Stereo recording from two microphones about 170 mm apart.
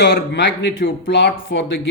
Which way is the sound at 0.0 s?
85° left.